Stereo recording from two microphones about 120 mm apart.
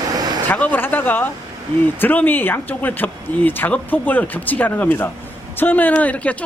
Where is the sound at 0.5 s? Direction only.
15° left (ahead or behind).